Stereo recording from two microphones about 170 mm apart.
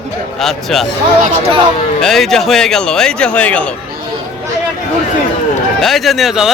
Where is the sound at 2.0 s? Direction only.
Centre (ahead or behind).